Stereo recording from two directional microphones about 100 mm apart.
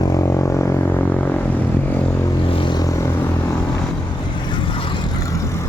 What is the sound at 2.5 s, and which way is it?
Vehicle, 50° left (ahead or behind).